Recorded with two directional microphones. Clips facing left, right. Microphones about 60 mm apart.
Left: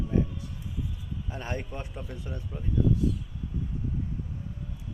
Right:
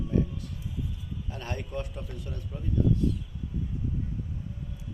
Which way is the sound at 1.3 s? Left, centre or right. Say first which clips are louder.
Even; left.